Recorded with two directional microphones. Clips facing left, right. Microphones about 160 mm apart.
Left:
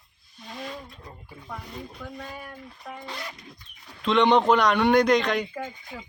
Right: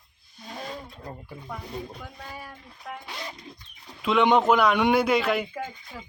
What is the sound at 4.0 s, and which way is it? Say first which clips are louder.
A man's voice: left 1 dB; 5° right (ahead or behind).